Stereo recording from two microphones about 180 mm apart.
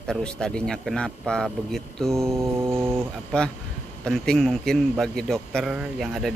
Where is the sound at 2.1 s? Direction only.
15° right (ahead or behind).